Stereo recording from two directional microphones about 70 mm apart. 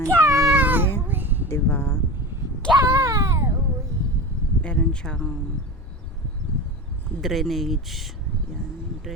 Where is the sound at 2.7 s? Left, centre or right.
Right.